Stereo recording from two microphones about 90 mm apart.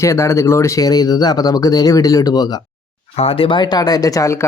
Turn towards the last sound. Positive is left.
turn(degrees=40)  # may be behind; listen again after turning